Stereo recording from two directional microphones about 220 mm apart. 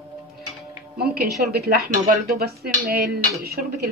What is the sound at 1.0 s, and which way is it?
A woman's voice, 45° right (ahead or behind).